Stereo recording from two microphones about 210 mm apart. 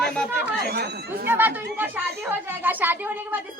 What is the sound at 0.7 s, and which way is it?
Speech, 50° right (ahead or behind).